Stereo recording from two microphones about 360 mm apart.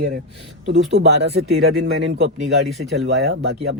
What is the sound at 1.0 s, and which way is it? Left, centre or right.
Speech, right.